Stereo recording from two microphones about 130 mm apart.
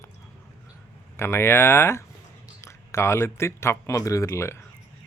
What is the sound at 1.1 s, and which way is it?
Speech, 20° left (ahead or behind).